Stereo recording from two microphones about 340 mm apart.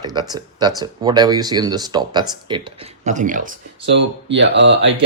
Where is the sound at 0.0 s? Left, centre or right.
Centre.